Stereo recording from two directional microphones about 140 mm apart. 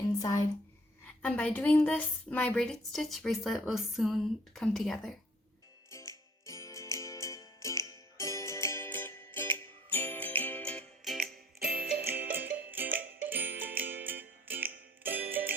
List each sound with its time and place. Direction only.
0.2 s speech: 25° left (ahead or behind)
1.2 s speech: 10° left (ahead or behind)
6.1 s music: 20° left (ahead or behind); by 15.5 s 15° right (ahead or behind)